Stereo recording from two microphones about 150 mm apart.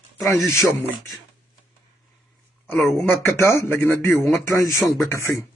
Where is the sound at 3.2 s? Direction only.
20° left (ahead or behind).